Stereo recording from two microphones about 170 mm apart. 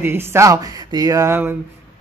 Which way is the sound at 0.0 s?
15° right (ahead or behind).